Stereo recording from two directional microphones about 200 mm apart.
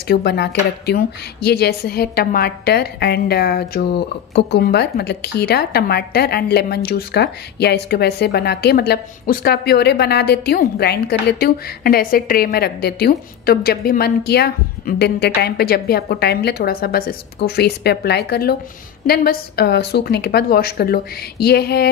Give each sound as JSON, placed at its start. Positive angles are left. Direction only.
{"t": 0.1, "sound": "a woman's voice", "side_deg": 55}